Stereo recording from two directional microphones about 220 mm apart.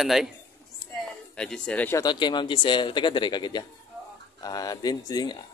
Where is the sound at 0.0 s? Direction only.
Centre (ahead or behind); by 5.4 s 20° left (ahead or behind).